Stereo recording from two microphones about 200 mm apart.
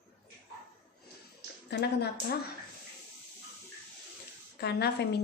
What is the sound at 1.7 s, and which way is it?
Speech, 55° left (ahead or behind).